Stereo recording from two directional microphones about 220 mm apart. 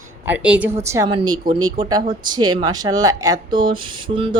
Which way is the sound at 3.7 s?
20° right (ahead or behind).